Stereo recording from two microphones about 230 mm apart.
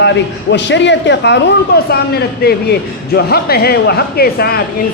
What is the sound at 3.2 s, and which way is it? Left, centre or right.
A man's voice, left.